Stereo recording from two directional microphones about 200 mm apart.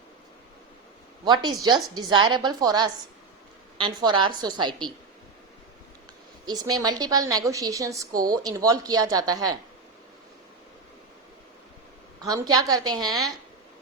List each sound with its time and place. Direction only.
1.2 s a woman's voice: 20° right (ahead or behind)
6.4 s a woman's voice: 20° right (ahead or behind)
12.2 s a woman's voice: 20° right (ahead or behind)